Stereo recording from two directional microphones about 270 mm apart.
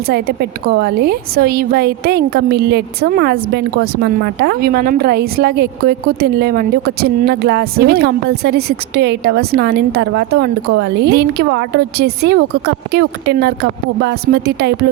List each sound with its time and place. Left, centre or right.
0.1 s a woman's voice: right